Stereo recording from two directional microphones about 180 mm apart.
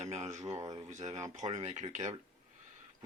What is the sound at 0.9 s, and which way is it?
Speech, 40° right (ahead or behind).